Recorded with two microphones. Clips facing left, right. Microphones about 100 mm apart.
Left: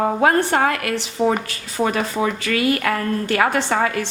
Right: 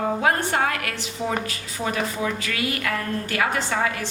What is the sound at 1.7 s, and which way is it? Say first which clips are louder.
A woman's voice: left 6 dB; 60° left (ahead or behind).